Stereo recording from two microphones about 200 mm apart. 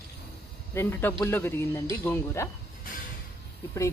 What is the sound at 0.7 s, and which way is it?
Speech, 10° left (ahead or behind).